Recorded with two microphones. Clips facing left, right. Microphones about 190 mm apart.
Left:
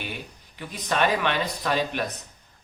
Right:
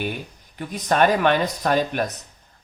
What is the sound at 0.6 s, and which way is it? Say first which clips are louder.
A man's voice: right 5 dB; 45° right (ahead or behind).